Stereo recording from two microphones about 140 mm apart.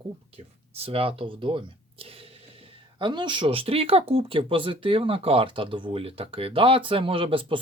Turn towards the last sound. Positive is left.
turn(degrees=-40)  # may be behind; listen again after turning